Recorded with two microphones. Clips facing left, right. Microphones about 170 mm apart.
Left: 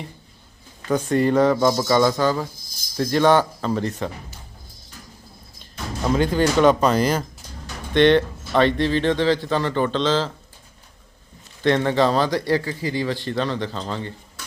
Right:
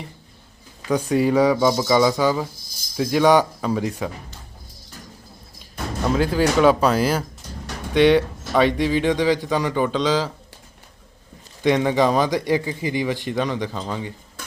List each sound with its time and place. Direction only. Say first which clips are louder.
0.9 s a man's voice: even; 10° right (ahead or behind)
6.1 s a man's voice: even; 5° right (ahead or behind)
11.6 s a man's voice: right 1 dB; 10° right (ahead or behind)
14.4 s beatboxing: right 4 dB; 50° right (ahead or behind)